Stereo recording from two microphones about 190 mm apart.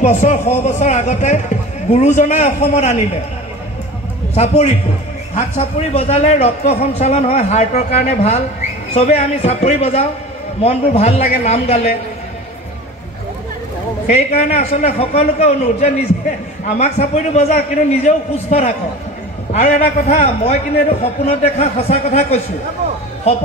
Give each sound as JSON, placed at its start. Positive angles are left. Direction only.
{"t": 0.0, "sound": "a man's voice", "side_deg": 40}
{"t": 5.3, "sound": "a man's voice", "side_deg": 35}
{"t": 14.0, "sound": "a man's voice", "side_deg": 35}